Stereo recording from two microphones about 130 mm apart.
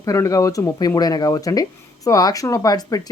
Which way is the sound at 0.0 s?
25° left (ahead or behind).